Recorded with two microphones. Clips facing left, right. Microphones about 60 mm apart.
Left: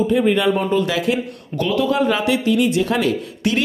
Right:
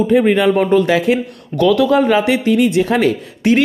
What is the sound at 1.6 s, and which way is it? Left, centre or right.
Speech, right.